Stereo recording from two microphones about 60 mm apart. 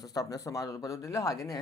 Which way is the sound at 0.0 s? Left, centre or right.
Left.